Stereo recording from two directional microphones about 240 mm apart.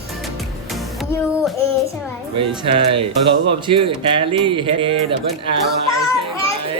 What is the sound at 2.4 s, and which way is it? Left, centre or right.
Speech, right.